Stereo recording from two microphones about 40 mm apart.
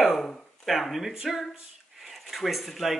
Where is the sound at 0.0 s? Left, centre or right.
Centre.